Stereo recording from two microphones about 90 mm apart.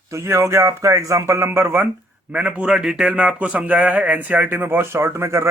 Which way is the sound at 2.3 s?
15° right (ahead or behind).